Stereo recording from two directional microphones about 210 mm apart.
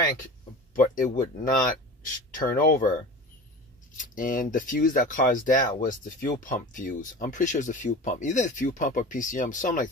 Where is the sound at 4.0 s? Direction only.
40° left (ahead or behind).